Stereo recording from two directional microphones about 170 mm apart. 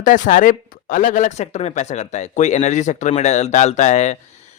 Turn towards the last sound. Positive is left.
turn(degrees=45)  # may be behind; listen again after turning